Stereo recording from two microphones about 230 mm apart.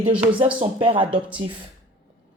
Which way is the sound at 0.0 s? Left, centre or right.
Right.